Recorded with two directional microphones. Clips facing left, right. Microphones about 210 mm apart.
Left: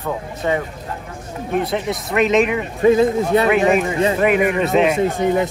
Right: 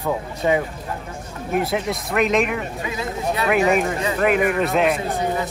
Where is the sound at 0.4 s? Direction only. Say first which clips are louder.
Right 1 dB; 10° right (ahead or behind).